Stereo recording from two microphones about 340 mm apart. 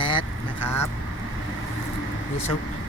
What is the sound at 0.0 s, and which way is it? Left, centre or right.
Vehicle, centre.